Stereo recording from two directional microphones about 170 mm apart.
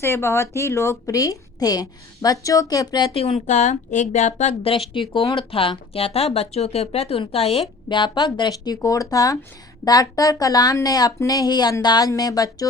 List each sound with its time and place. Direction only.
0.0 s a woman's voice: 15° left (ahead or behind)